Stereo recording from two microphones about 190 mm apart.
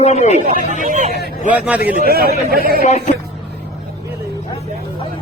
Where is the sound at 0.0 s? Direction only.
35° left (ahead or behind).